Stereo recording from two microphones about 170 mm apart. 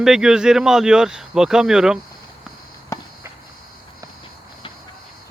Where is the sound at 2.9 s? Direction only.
20° left (ahead or behind).